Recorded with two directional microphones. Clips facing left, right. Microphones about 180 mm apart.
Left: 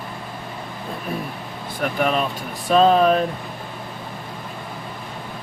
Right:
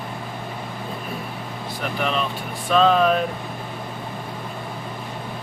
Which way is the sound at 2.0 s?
45° left (ahead or behind).